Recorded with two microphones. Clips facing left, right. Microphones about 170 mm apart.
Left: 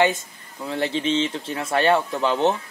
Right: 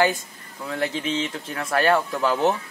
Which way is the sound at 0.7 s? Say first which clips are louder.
Left 3 dB; 30° left (ahead or behind).